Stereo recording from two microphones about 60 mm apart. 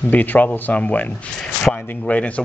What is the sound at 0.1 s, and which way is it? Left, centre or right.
Speech, left.